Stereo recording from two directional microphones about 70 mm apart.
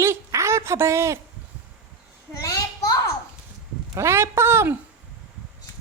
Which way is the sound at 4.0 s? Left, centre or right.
Right.